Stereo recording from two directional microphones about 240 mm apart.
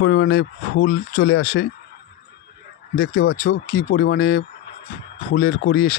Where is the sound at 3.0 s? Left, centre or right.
Left.